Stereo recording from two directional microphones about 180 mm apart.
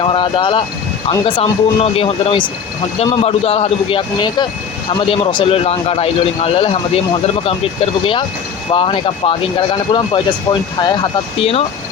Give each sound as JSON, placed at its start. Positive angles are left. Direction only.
{"t": 0.0, "sound": "a man's voice", "side_deg": 25}